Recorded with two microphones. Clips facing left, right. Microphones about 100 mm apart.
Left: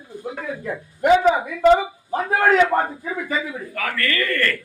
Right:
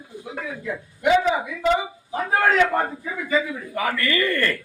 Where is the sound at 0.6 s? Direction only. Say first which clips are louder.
Left 2 dB; 45° left (ahead or behind).